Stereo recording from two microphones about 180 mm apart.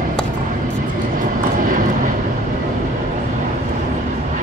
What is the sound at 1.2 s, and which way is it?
Vehicle, 45° right (ahead or behind).